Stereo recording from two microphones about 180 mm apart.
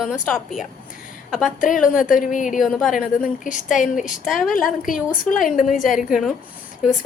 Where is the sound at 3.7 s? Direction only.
45° left (ahead or behind).